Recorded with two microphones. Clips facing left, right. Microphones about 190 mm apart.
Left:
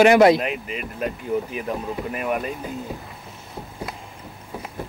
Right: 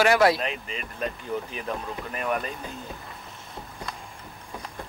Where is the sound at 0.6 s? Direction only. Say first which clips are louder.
Left 4 dB; 10° left (ahead or behind).